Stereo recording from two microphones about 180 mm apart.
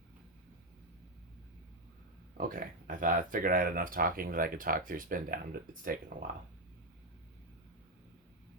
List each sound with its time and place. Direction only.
2.4 s speech: 50° right (ahead or behind)